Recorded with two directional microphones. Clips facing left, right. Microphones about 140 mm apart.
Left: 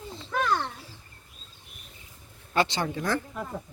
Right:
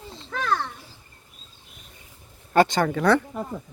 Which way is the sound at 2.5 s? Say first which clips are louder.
Right 7 dB; 50° right (ahead or behind).